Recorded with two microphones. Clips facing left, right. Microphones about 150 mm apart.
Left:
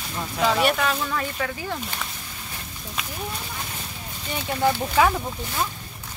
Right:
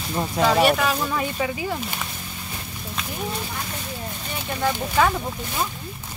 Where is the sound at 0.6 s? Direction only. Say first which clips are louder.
Right 3 dB; 5° right (ahead or behind).